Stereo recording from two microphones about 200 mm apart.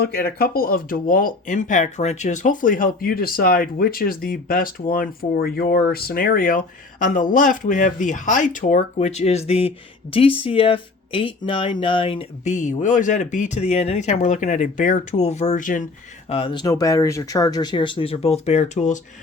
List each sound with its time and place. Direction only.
0.0 s speech: 50° left (ahead or behind)
16.3 s speech: 25° left (ahead or behind)